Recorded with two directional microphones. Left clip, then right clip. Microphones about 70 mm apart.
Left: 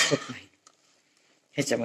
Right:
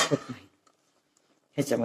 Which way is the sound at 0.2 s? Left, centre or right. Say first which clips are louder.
Left 3 dB; right.